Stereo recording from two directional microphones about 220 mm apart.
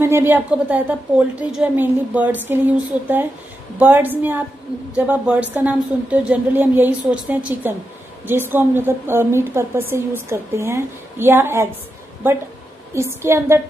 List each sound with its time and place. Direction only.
0.0 s speech: 10° right (ahead or behind)
3.8 s speech: 10° right (ahead or behind)